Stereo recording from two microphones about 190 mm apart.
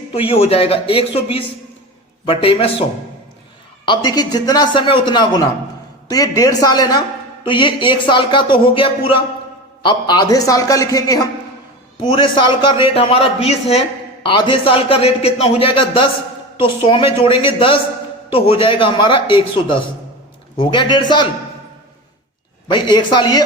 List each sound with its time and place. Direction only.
0.1 s a man's voice: 30° left (ahead or behind)
3.8 s a man's voice: 20° left (ahead or behind)
22.7 s a man's voice: 25° left (ahead or behind)